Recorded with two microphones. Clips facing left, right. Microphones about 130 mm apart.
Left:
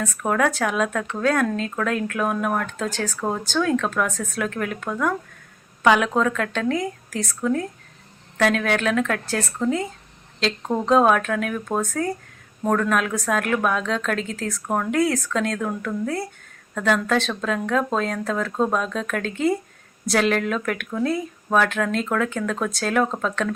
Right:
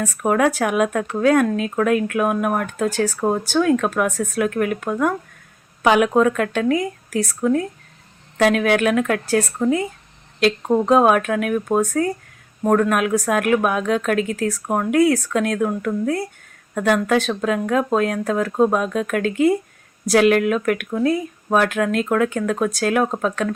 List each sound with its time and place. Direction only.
0.2 s speech: 15° right (ahead or behind)